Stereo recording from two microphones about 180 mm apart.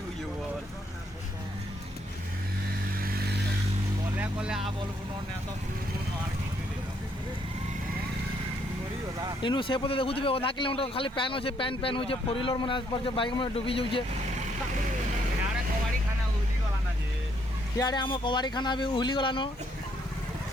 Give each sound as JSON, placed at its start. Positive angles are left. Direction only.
{"t": 3.0, "sound": "vehicle", "side_deg": -55}
{"t": 4.2, "sound": "speech", "side_deg": -5}
{"t": 9.4, "sound": "speech", "side_deg": 25}
{"t": 17.7, "sound": "speech", "side_deg": 25}